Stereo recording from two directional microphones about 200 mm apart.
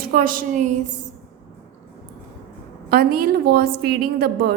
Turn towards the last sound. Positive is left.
turn(degrees=-50)  # may be behind; listen again after turning